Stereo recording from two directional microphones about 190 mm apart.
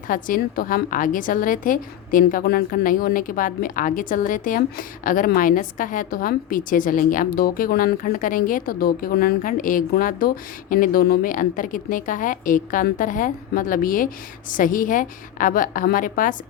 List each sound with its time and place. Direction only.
0.1 s a woman's voice: 45° left (ahead or behind)